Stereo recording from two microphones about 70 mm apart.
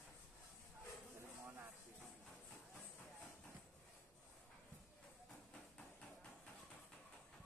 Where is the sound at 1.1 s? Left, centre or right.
Right.